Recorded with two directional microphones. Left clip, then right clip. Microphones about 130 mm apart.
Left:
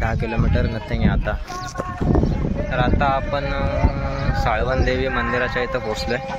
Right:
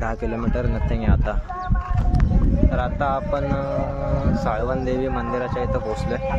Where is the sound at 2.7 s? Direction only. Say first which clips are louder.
Left 5 dB; 15° right (ahead or behind).